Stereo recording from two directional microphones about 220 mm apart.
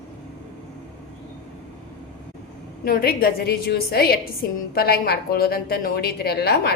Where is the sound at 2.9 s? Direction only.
45° left (ahead or behind).